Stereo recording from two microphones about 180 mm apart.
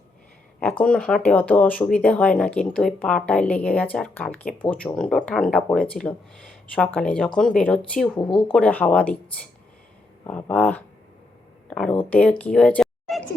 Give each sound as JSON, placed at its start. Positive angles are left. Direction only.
{"t": 0.6, "sound": "speech", "side_deg": 10}
{"t": 8.2, "sound": "speech", "side_deg": 25}
{"t": 8.4, "sound": "speech", "side_deg": 5}
{"t": 10.2, "sound": "speech", "side_deg": 10}
{"t": 12.5, "sound": "a sound", "side_deg": 5}